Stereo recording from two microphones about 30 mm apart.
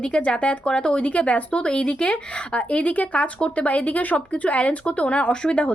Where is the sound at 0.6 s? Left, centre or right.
Left.